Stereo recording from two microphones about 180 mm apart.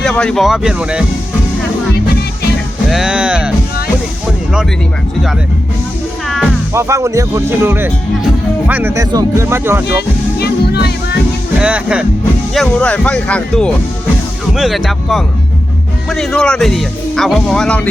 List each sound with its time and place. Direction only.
0.0 s speech: 5° left (ahead or behind)
2.9 s speech: 5° right (ahead or behind)
6.2 s music: centre (ahead or behind)
6.7 s speech: 15° right (ahead or behind)
10.3 s music: 60° left (ahead or behind)
11.6 s speech: 5° right (ahead or behind)
12.5 s speech: 5° left (ahead or behind)